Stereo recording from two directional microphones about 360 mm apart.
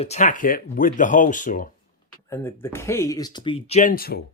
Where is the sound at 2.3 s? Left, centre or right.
Centre.